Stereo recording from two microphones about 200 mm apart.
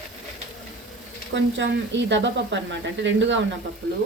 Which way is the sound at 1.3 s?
65° right (ahead or behind).